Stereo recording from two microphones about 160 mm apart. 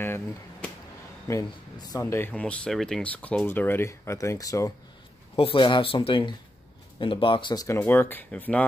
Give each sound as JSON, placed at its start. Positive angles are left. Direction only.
{"t": 0.0, "sound": "speech", "side_deg": 15}
{"t": 5.3, "sound": "speech", "side_deg": 35}
{"t": 7.6, "sound": "speech", "side_deg": 15}